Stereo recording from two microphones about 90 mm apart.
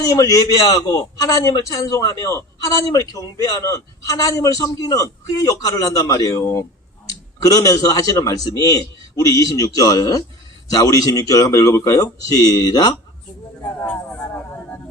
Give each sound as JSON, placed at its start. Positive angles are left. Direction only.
{"t": 0.1, "sound": "a man's voice", "side_deg": 40}